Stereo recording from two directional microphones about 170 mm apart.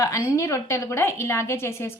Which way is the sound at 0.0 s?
15° left (ahead or behind).